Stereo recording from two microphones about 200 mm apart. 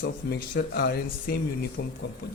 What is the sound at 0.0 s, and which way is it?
A man's voice, 60° left (ahead or behind).